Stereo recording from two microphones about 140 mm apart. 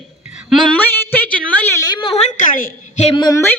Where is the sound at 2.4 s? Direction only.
75° left (ahead or behind).